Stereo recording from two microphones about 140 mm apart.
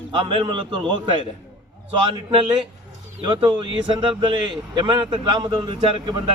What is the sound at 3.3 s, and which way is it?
A man's voice, 35° right (ahead or behind).